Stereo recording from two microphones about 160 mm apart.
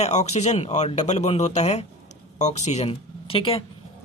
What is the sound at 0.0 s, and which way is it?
Speech, 45° left (ahead or behind).